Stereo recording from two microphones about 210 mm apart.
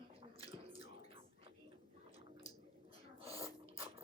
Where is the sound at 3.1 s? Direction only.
25° right (ahead or behind).